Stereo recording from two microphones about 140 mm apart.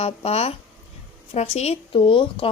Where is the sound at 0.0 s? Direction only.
45° left (ahead or behind).